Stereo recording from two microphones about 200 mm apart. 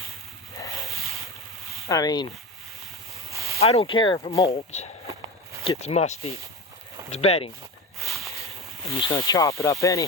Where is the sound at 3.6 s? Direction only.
30° left (ahead or behind).